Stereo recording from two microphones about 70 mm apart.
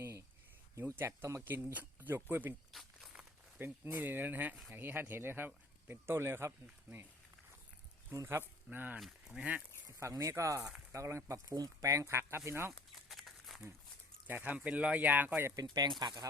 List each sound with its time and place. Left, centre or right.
0.0 s cricket: right
0.8 s speech: right
3.6 s speech: right
8.1 s speech: right
9.2 s speech: centre
10.0 s speech: right
13.1 s a sound: centre
14.3 s speech: right
15.5 s speech: right